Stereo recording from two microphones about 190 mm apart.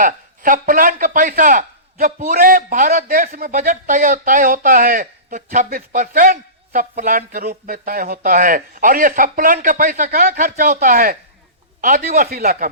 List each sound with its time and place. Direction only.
0.0 s speech: 45° right (ahead or behind)